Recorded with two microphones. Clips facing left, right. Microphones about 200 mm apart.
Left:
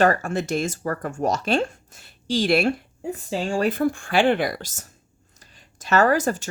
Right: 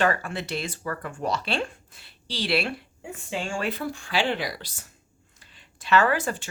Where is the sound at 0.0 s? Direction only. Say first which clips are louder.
Left 5 dB; 45° left (ahead or behind).